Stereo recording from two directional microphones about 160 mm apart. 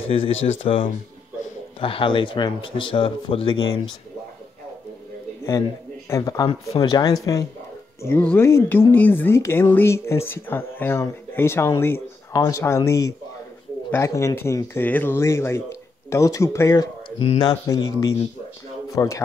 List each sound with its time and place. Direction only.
0.1 s speech: 35° left (ahead or behind)
6.0 s speech: 20° left (ahead or behind)
8.0 s speech: 10° left (ahead or behind)
17.2 s speech: 35° left (ahead or behind)
17.6 s speech: 20° left (ahead or behind)